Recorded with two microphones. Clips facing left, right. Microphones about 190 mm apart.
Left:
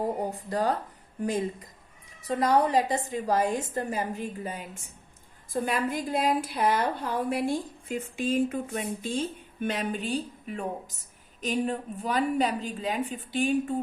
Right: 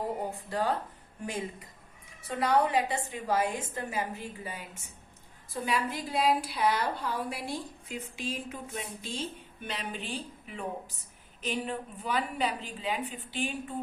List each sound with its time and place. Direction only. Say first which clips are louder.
0.2 s speech: left 4 dB; 15° left (ahead or behind)
2.2 s a woman's voice: left 3 dB; 40° left (ahead or behind)